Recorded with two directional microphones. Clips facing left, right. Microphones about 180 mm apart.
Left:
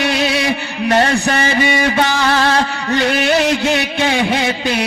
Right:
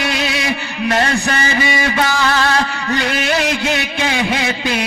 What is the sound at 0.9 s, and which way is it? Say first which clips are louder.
Music: left 3 dB; 35° left (ahead or behind).